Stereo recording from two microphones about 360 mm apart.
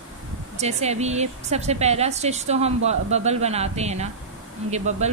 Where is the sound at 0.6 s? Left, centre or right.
Centre.